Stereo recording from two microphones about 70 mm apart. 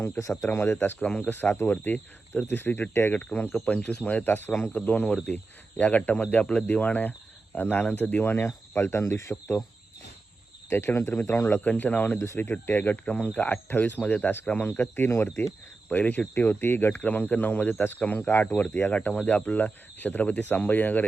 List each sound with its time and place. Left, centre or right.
0.0 s speech: left
0.8 s speech: left
1.3 s speech: left
10.7 s speech: left
11.6 s speech: left
13.1 s speech: centre
14.7 s speech: left
17.0 s speech: left